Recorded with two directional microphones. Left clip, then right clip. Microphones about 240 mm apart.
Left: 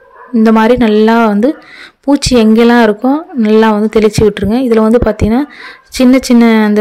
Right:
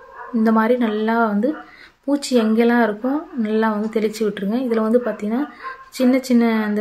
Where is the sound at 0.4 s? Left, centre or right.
Left.